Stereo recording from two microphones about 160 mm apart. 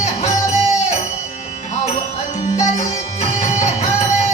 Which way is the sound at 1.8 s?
50° left (ahead or behind).